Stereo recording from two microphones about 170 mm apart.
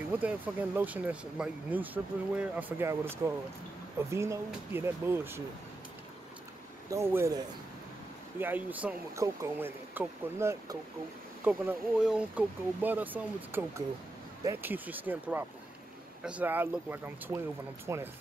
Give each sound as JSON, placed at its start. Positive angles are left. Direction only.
{"t": 0.1, "sound": "speech", "side_deg": -10}
{"t": 6.9, "sound": "speech", "side_deg": -15}